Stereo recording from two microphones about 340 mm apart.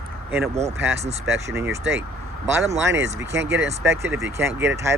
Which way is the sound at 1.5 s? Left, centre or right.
Centre.